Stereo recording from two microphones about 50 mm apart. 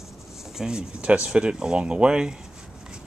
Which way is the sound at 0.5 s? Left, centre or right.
Centre.